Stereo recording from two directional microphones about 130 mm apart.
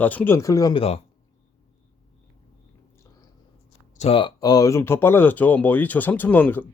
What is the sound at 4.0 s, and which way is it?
Speech, 45° left (ahead or behind).